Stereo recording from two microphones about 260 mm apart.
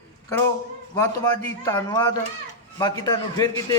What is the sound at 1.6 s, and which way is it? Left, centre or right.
A man's voice, centre.